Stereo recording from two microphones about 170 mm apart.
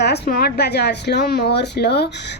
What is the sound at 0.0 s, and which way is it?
Speech, 75° left (ahead or behind).